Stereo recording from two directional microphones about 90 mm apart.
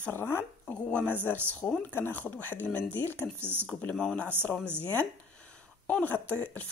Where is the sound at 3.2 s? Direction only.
25° right (ahead or behind).